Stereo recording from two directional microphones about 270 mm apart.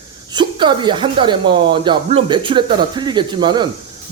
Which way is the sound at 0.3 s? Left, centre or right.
Centre.